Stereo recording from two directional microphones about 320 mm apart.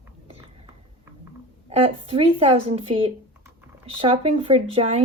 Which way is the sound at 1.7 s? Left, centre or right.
Centre.